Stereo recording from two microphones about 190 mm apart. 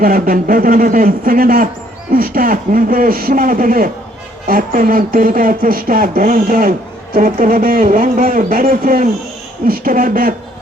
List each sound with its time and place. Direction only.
0.0 s speech: 50° right (ahead or behind)